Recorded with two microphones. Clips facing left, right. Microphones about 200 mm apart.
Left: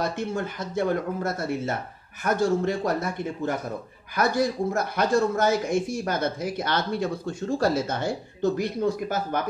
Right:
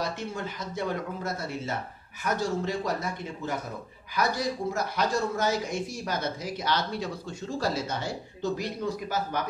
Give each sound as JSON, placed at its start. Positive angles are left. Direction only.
{"t": 0.0, "sound": "speech", "side_deg": 55}